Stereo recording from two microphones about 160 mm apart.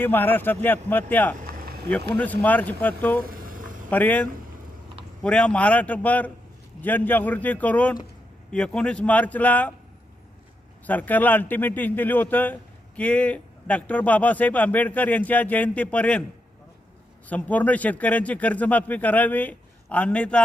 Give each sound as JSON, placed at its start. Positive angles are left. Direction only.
{"t": 0.0, "sound": "a man's voice", "side_deg": 10}
{"t": 1.5, "sound": "a sound", "side_deg": -70}
{"t": 1.9, "sound": "a man's voice", "side_deg": 10}
{"t": 3.2, "sound": "a sound", "side_deg": -60}
{"t": 3.8, "sound": "a man's voice", "side_deg": 10}
{"t": 10.8, "sound": "a man's voice", "side_deg": 10}
{"t": 17.2, "sound": "a man's voice", "side_deg": 10}